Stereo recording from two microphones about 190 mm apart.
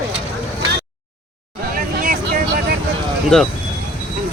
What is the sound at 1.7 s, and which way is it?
Vehicle, 45° right (ahead or behind).